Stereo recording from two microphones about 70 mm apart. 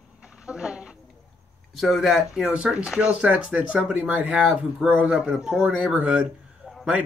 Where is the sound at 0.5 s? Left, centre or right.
Centre.